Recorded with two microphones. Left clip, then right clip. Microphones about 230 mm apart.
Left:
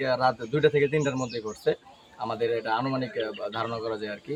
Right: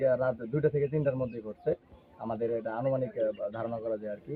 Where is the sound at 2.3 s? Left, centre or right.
Centre.